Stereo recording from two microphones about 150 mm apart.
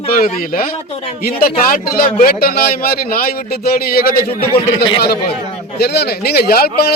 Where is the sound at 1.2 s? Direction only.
90° left.